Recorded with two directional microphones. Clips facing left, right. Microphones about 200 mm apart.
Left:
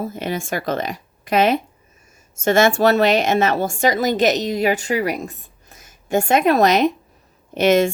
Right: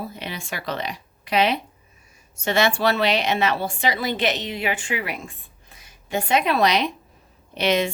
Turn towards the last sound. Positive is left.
turn(degrees=45)  # may be behind; listen again after turning